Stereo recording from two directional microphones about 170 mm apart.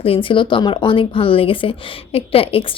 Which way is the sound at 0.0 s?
30° left (ahead or behind).